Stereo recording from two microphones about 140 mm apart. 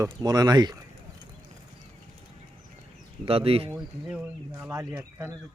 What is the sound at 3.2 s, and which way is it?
Speech, 45° right (ahead or behind).